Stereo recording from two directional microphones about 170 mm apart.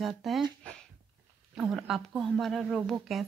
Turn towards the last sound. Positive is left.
turn(degrees=0)  # may be behind; listen again after turning